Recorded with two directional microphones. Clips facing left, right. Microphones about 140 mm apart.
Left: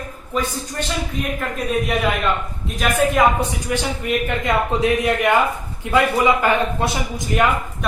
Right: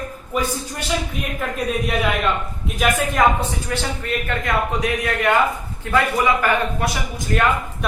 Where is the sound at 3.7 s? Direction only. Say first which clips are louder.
Left 4 dB; 15° left (ahead or behind).